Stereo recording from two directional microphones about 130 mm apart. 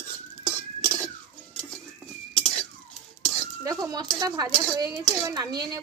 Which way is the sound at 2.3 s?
5° left (ahead or behind).